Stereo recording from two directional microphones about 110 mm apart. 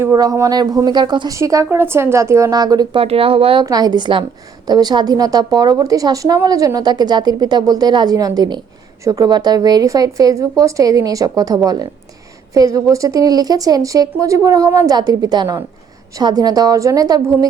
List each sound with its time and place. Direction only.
0.0 s speech: 30° right (ahead or behind)
1.3 s a woman's voice: 30° right (ahead or behind)
2.9 s speech: 60° right (ahead or behind)
3.7 s speech: 35° right (ahead or behind)